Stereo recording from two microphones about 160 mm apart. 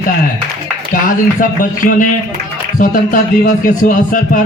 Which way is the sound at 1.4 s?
60° left (ahead or behind).